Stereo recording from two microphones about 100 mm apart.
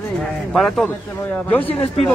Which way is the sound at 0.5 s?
5° left (ahead or behind).